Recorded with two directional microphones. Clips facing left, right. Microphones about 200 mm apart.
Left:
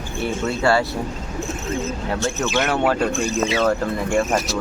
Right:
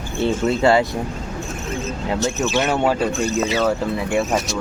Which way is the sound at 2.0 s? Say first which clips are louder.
Right 5 dB; 15° right (ahead or behind).